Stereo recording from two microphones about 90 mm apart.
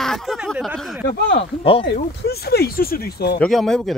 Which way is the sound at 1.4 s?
90° left.